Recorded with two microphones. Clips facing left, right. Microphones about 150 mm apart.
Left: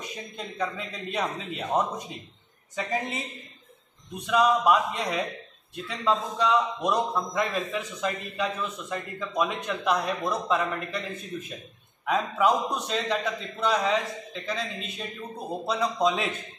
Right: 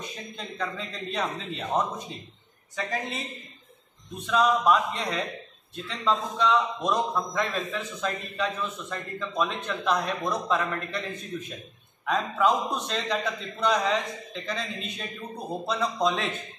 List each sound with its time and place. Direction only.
0.4 s a man's voice: 10° left (ahead or behind)
4.3 s a man's voice: 5° left (ahead or behind)